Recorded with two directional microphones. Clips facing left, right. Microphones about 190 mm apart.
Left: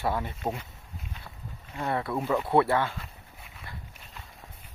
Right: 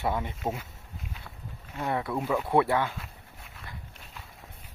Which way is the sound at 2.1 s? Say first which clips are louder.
Left 1 dB; centre (ahead or behind).